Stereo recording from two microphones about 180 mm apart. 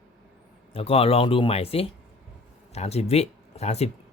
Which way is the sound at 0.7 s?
35° left (ahead or behind).